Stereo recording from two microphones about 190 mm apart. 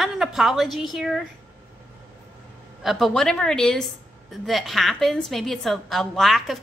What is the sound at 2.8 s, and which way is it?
A woman's voice, centre (ahead or behind).